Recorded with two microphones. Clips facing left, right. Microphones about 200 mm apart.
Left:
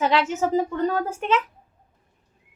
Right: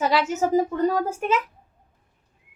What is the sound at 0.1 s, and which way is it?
A woman's voice, 10° right (ahead or behind).